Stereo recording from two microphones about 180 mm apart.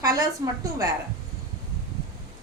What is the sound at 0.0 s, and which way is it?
Speech, 20° right (ahead or behind).